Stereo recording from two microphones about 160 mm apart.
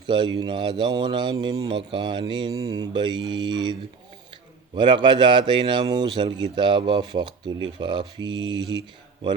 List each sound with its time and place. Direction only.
0.1 s a man's voice: 30° right (ahead or behind)